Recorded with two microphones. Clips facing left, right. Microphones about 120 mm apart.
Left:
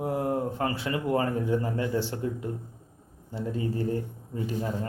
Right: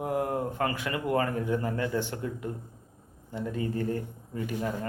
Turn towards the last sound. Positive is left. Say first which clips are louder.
# left 1 dB
turn(degrees=30)  # may be behind; listen again after turning